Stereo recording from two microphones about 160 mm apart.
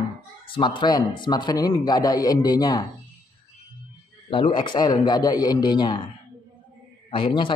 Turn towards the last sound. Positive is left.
turn(degrees=30)  # may be behind; listen again after turning